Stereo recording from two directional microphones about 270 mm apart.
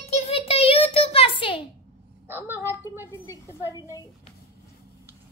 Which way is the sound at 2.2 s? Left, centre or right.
Centre.